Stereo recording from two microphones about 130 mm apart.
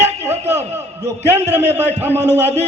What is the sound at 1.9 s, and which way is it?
Speech, 60° right (ahead or behind).